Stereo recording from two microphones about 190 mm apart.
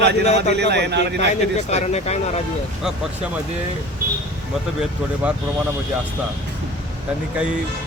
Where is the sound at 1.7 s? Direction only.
35° left (ahead or behind).